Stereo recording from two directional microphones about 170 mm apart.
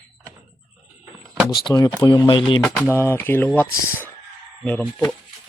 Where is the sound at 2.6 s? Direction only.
Centre (ahead or behind).